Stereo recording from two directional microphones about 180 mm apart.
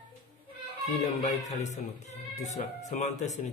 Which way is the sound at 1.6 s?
40° left (ahead or behind).